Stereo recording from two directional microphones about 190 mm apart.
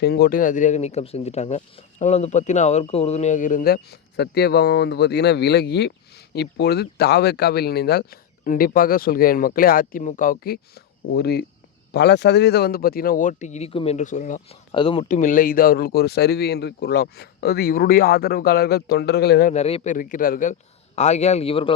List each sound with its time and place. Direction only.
0.0 s speech: 55° left (ahead or behind)
14.7 s speech: 30° left (ahead or behind)
15.0 s speech: 40° left (ahead or behind)
19.5 s a man's voice: 35° left (ahead or behind)